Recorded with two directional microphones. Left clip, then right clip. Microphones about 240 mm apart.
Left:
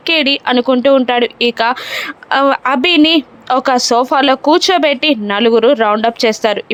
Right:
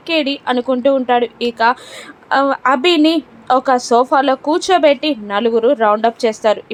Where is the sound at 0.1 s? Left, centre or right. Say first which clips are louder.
Left 4 dB; left.